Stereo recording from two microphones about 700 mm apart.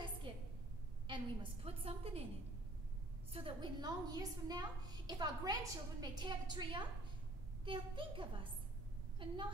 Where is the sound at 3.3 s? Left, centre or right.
Centre.